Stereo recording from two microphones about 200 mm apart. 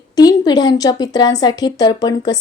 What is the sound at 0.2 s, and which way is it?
A woman's voice, 20° left (ahead or behind).